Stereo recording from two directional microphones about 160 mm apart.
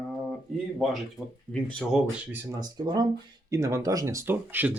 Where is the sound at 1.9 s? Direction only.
10° right (ahead or behind).